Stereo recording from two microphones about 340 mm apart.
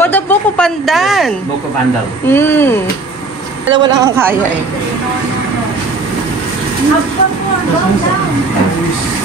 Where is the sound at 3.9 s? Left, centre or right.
Centre.